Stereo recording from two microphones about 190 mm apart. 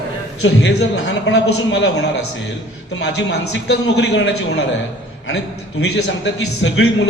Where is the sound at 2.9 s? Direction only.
65° left (ahead or behind).